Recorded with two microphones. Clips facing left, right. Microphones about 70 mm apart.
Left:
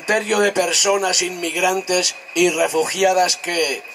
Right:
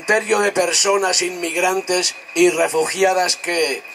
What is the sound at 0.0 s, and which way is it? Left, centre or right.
Speech, right.